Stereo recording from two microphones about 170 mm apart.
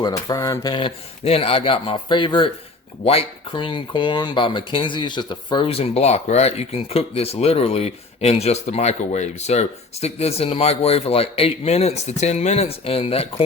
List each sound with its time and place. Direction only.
0.0 s speech: 20° left (ahead or behind)